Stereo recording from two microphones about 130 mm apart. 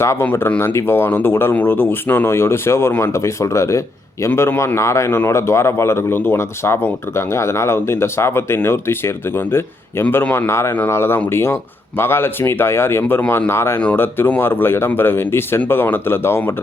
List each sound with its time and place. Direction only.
0.0 s speech: 20° left (ahead or behind)